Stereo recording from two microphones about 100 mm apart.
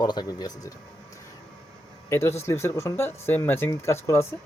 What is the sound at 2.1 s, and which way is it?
Speech, 25° left (ahead or behind).